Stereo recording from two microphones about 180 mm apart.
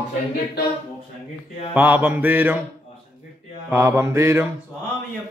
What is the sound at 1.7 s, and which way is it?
Speech, 10° right (ahead or behind).